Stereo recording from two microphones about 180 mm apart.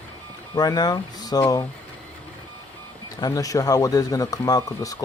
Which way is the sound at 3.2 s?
20° left (ahead or behind).